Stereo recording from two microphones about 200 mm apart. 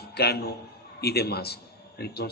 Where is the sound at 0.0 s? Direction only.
55° left (ahead or behind).